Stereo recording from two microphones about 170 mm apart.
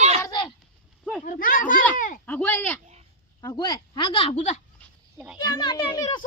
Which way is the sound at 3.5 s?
25° left (ahead or behind).